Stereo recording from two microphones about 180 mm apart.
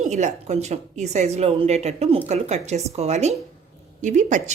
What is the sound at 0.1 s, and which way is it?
Speech, 40° right (ahead or behind).